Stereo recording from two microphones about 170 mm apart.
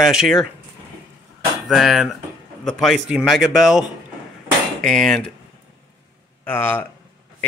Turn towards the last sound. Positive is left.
turn(degrees=10)  # may be behind; listen again after turning